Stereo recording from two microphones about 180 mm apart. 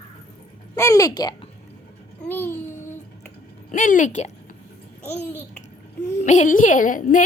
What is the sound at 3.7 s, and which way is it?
Speech, 45° left (ahead or behind).